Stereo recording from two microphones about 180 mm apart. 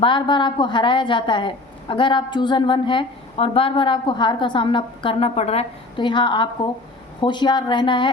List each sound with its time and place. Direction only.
0.0 s a woman's voice: 25° left (ahead or behind)